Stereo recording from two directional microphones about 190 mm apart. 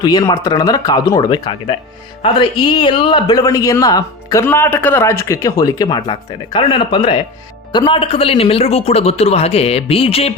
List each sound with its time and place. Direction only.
0.0 s a man's voice: 20° left (ahead or behind)